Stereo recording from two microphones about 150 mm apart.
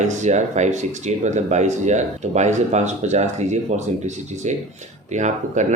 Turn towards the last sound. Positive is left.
turn(degrees=-55)  # may be behind; listen again after turning